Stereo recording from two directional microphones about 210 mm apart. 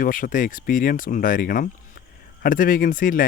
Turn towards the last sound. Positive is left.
turn(degrees=40)  # may be behind; listen again after turning